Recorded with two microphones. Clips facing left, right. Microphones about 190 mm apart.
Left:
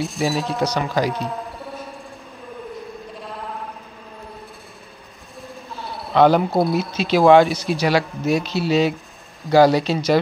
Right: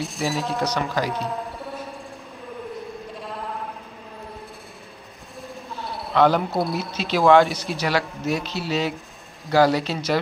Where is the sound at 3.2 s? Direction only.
Centre (ahead or behind).